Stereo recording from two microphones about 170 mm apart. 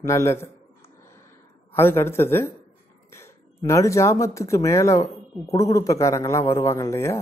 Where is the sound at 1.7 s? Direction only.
15° left (ahead or behind).